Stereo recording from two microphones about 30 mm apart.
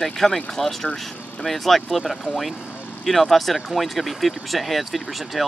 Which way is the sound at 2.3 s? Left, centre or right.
Left.